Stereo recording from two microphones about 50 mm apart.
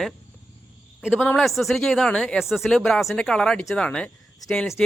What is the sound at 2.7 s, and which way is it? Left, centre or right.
Speech, centre.